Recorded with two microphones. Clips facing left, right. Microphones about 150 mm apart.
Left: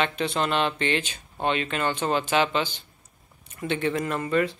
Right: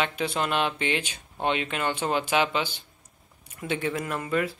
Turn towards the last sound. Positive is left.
turn(degrees=-5)  # may be behind; listen again after turning